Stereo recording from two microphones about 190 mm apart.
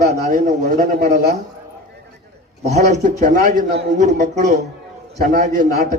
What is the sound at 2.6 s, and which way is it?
A man's voice, 35° right (ahead or behind).